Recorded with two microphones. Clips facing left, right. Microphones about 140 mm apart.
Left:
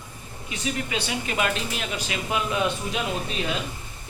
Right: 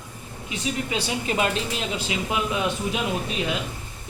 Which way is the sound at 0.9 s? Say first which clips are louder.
Right 2 dB; 30° right (ahead or behind).